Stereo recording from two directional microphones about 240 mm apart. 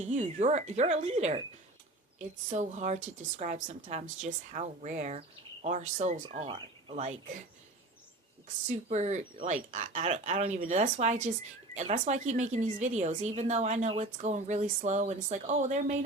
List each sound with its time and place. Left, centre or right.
0.0 s a woman's voice: right
8.7 s speech: right